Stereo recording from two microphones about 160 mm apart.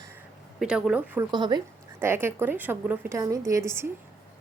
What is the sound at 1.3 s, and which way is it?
Speech, 25° right (ahead or behind).